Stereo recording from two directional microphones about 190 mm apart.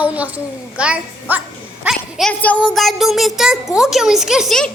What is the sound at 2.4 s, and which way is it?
A child's voice, 5° left (ahead or behind).